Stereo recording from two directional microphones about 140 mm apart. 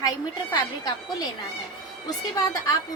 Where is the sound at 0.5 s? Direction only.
30° left (ahead or behind).